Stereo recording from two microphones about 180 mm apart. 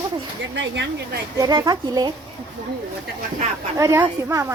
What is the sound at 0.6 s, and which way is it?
Speech, 75° right (ahead or behind).